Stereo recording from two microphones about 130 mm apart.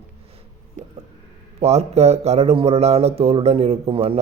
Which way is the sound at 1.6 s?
55° right (ahead or behind).